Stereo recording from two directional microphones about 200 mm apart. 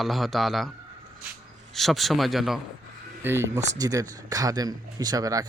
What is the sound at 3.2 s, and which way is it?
Speech, 15° right (ahead or behind).